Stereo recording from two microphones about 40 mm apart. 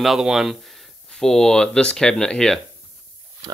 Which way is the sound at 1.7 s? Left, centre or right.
Left.